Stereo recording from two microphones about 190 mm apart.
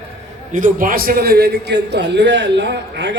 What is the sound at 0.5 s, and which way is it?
A man's voice, 45° right (ahead or behind).